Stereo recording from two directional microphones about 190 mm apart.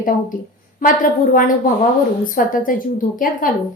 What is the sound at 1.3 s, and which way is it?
A woman's voice, 45° left (ahead or behind).